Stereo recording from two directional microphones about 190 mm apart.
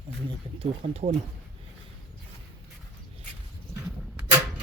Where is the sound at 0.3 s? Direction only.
30° right (ahead or behind).